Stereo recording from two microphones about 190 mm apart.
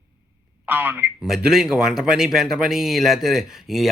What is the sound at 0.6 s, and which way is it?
Speech, 10° right (ahead or behind).